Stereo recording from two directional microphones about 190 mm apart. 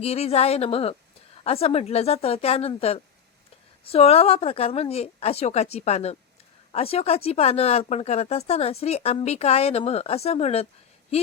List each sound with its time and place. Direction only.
0.0 s speech: 35° left (ahead or behind)